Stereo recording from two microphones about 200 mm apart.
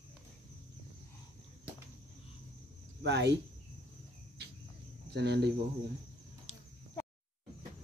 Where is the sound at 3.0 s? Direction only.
60° right (ahead or behind).